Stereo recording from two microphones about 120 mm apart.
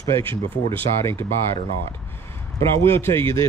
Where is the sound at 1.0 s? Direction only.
20° left (ahead or behind).